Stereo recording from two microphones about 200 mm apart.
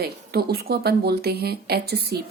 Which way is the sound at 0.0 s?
50° right (ahead or behind).